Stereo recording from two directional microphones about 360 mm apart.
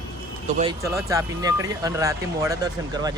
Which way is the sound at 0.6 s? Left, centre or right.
Centre.